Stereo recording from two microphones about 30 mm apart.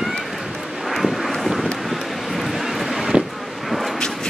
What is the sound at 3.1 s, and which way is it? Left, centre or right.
Wind, right.